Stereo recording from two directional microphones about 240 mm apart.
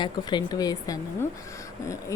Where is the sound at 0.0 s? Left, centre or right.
Centre.